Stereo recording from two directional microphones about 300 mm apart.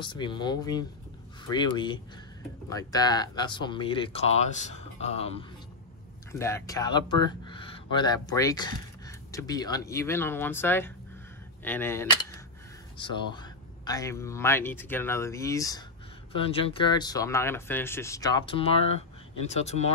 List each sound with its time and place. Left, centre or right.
0.0 s speech: centre
6.3 s speech: centre